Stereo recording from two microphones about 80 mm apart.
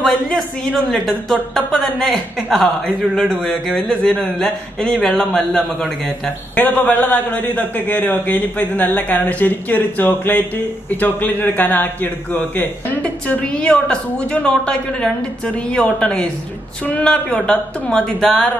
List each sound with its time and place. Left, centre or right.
0.0 s a sound: centre
0.8 s a man's voice: centre
6.2 s a man's voice: centre